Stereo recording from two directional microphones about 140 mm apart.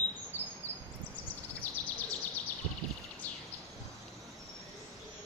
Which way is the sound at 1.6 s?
10° left (ahead or behind).